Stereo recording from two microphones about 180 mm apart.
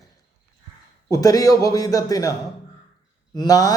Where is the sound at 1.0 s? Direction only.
20° left (ahead or behind).